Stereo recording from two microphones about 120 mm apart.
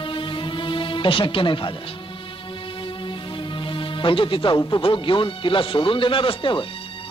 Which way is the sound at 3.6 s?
45° left (ahead or behind).